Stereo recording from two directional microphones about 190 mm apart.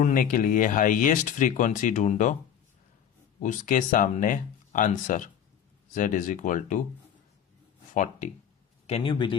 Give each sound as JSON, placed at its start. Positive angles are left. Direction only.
{"t": 0.0, "sound": "speech", "side_deg": 45}
{"t": 3.4, "sound": "speech", "side_deg": 45}
{"t": 7.9, "sound": "speech", "side_deg": 40}
{"t": 8.9, "sound": "a man's voice", "side_deg": 25}